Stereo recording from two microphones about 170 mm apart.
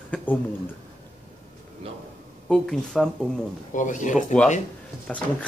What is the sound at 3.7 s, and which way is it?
Speech, 50° left (ahead or behind).